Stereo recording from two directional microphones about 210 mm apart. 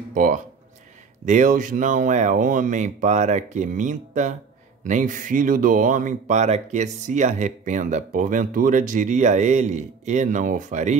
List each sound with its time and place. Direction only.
0.1 s speech: 40° right (ahead or behind)